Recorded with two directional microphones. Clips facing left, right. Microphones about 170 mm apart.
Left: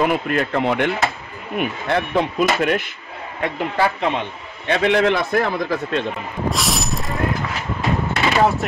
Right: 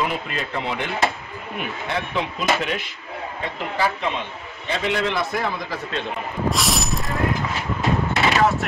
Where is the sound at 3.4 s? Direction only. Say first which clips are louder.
Left 5 dB; 60° left (ahead or behind).